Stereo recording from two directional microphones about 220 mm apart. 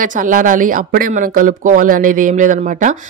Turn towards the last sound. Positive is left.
turn(degrees=-35)  # may be behind; listen again after turning